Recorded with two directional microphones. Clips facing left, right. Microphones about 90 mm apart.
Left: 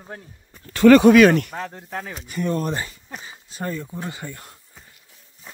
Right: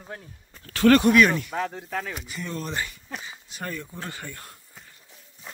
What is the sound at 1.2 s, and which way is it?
Speech, 65° left (ahead or behind).